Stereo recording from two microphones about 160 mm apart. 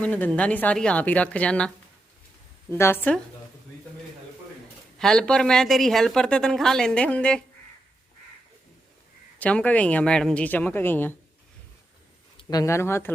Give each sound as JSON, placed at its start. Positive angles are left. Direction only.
{"t": 0.0, "sound": "speech", "side_deg": 10}
{"t": 4.9, "sound": "a woman's voice", "side_deg": 5}
{"t": 9.4, "sound": "speech", "side_deg": 10}
{"t": 12.4, "sound": "speech", "side_deg": 25}